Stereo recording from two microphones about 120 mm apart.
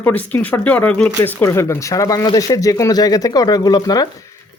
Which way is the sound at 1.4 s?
25° left (ahead or behind).